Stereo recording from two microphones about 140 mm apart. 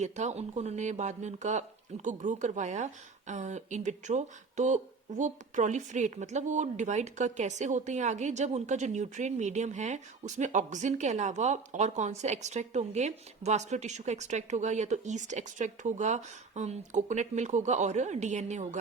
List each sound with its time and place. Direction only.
0.0 s speech: 55° right (ahead or behind)